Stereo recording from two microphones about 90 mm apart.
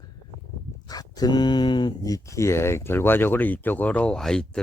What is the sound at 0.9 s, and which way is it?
Speech, 45° left (ahead or behind).